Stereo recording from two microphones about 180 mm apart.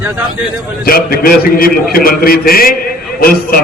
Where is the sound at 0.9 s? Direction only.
55° left (ahead or behind).